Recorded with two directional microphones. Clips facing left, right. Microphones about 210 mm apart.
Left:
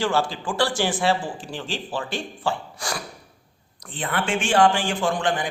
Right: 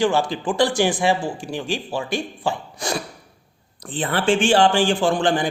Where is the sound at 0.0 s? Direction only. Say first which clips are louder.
Right 4 dB; 15° right (ahead or behind).